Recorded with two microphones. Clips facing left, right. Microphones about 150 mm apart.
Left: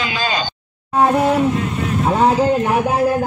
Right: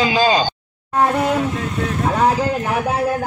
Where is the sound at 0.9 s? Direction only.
20° left (ahead or behind).